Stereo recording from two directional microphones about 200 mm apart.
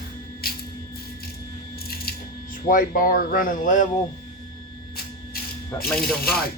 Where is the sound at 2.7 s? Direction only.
45° left (ahead or behind).